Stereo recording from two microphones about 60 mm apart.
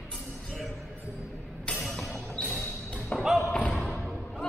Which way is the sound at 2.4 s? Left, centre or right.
Left.